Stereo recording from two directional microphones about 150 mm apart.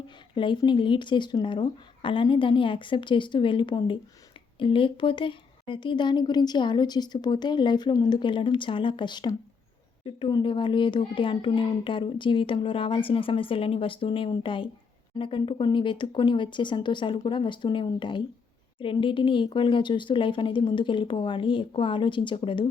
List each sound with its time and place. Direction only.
0.3 s a woman's voice: 30° left (ahead or behind)